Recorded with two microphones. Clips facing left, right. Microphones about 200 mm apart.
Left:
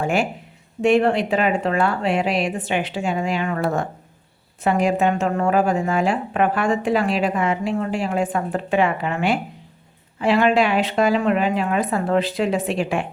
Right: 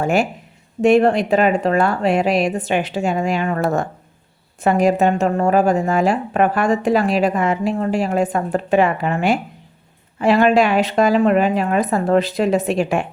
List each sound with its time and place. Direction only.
0.0 s a woman's voice: 40° right (ahead or behind)